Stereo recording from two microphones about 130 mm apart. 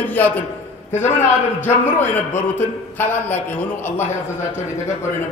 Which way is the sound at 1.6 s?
15° left (ahead or behind).